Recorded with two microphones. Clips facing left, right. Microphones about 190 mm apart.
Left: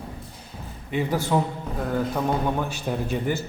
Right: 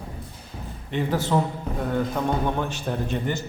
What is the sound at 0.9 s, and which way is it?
A man's voice, 10° left (ahead or behind).